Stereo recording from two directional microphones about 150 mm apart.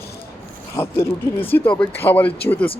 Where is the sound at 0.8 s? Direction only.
15° left (ahead or behind).